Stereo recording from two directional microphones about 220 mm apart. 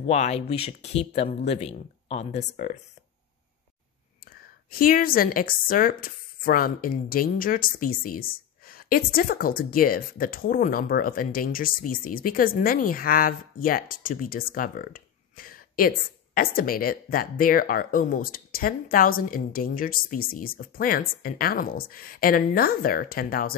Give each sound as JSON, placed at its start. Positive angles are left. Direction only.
{"t": 0.0, "sound": "speech", "side_deg": 30}
{"t": 4.6, "sound": "speech", "side_deg": 40}